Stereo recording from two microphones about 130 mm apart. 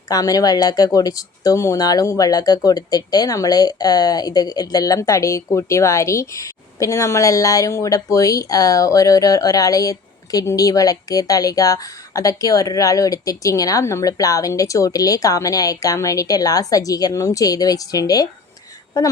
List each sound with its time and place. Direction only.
0.1 s speech: 30° left (ahead or behind)